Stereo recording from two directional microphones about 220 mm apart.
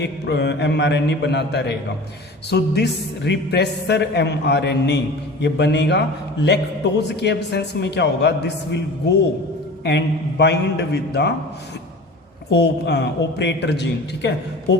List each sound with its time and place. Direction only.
0.0 s a woman's voice: 50° left (ahead or behind)
7.1 s a woman's voice: 50° left (ahead or behind)
12.5 s a woman's voice: 50° left (ahead or behind)